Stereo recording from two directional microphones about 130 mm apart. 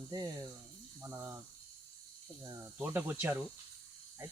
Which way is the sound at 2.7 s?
15° right (ahead or behind).